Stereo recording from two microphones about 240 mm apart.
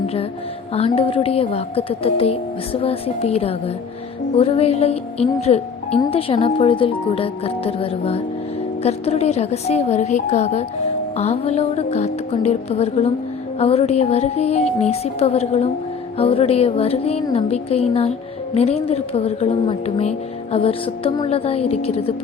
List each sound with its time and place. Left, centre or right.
0.7 s speech: left